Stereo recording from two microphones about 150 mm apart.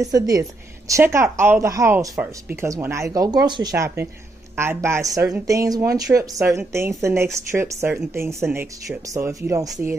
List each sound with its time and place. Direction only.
0.0 s a woman's voice: 25° right (ahead or behind)